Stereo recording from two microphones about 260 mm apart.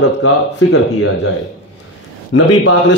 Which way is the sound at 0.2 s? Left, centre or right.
Left.